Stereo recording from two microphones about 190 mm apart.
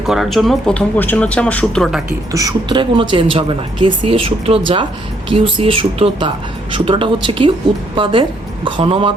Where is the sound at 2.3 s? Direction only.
15° right (ahead or behind).